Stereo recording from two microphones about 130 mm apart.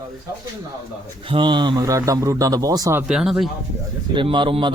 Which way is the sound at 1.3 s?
40° right (ahead or behind).